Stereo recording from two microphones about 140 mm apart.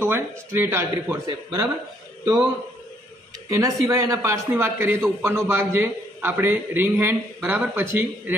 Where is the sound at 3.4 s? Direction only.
20° right (ahead or behind).